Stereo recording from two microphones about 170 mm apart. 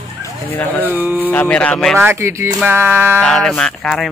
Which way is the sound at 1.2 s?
10° left (ahead or behind).